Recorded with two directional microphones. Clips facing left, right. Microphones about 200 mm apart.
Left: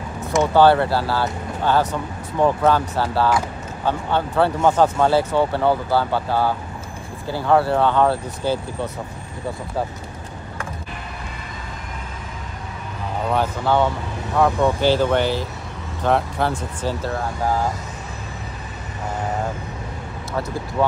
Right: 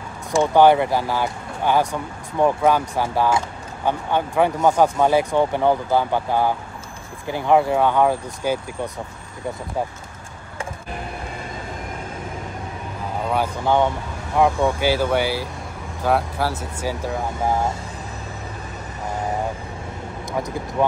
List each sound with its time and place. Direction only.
0.4 s speech: 15° right (ahead or behind)
3.3 s a sound: 25° right (ahead or behind)
4.1 s speech: 15° right (ahead or behind)
13.3 s speech: 15° right (ahead or behind)